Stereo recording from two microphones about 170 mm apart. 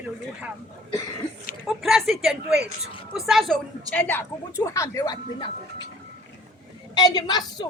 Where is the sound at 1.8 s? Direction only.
Centre (ahead or behind).